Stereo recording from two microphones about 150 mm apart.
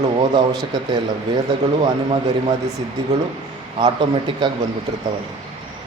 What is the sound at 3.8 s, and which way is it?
Speech, 35° right (ahead or behind).